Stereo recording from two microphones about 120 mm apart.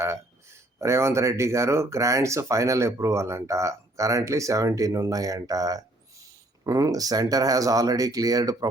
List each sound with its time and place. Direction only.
0.0 s speech: 25° right (ahead or behind)